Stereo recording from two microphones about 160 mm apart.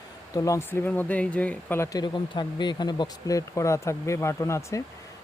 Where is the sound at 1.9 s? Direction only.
30° left (ahead or behind).